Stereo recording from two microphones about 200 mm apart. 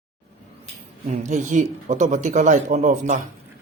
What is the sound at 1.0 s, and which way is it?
Speech, 35° right (ahead or behind).